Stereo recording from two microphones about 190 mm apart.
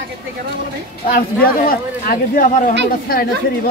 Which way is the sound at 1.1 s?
50° left (ahead or behind).